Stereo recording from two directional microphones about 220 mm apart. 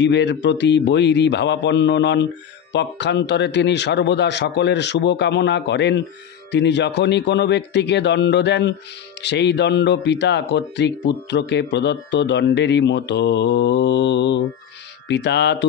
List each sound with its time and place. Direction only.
0.0 s speech: 50° left (ahead or behind)